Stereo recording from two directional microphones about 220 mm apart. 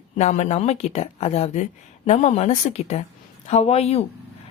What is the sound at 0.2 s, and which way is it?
A woman's voice, 30° left (ahead or behind).